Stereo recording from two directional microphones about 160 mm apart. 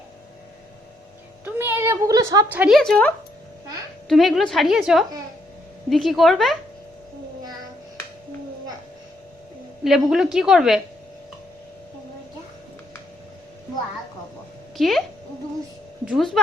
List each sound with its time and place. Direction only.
1.5 s a sound: 15° right (ahead or behind)
2.5 s a woman's voice: 5° right (ahead or behind)
4.1 s a woman's voice: centre (ahead or behind)
9.8 s a woman's voice: 5° right (ahead or behind)
14.8 s a woman's voice: centre (ahead or behind)
16.0 s a woman's voice: centre (ahead or behind)